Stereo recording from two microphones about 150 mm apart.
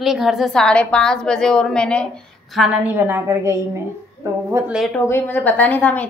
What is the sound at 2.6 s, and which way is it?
A woman's voice, 10° right (ahead or behind).